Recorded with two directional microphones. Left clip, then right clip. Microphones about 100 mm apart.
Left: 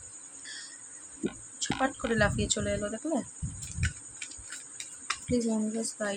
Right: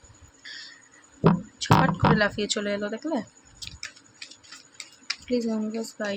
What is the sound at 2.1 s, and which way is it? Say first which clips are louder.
Speech: right 3 dB; 20° right (ahead or behind).